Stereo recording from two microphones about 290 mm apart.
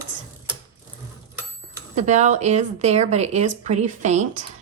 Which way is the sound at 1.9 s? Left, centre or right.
Right.